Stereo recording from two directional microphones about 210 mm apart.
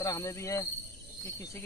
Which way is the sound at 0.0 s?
15° left (ahead or behind).